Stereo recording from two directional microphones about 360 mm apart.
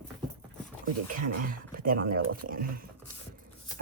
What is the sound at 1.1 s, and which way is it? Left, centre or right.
Speech, right.